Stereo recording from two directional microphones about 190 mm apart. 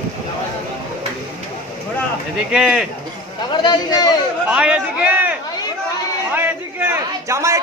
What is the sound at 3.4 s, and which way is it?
Speech, 20° left (ahead or behind).